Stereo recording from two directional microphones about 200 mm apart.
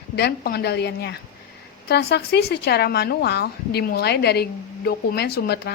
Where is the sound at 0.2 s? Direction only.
55° left (ahead or behind).